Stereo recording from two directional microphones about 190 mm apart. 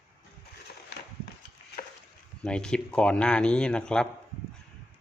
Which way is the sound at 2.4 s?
5° left (ahead or behind).